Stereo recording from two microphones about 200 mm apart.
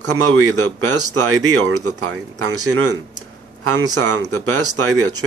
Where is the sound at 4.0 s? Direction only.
90° right.